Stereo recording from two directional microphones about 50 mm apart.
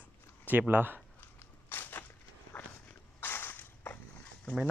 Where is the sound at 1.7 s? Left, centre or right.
Left.